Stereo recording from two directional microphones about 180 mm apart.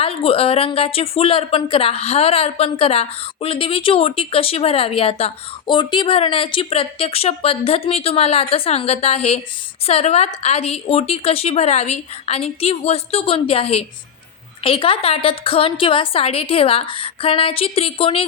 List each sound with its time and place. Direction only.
0.0 s speech: 30° left (ahead or behind)